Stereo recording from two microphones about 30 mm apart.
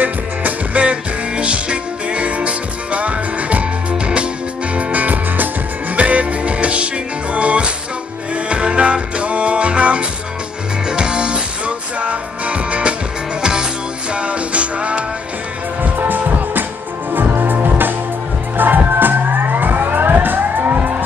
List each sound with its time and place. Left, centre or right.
0.0 s music: right
0.7 s music: right
4.7 s music: right
5.9 s music: right
10.9 s music: right
13.4 s music: right
14.1 s music: right
15.8 s music: right